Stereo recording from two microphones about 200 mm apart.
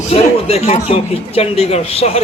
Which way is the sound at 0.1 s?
30° left (ahead or behind).